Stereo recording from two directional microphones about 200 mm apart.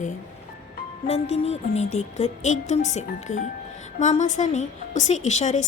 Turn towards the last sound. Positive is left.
turn(degrees=35)  # may be behind; listen again after turning